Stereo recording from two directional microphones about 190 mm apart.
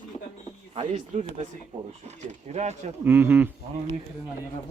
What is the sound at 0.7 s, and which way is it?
Speech, 35° right (ahead or behind).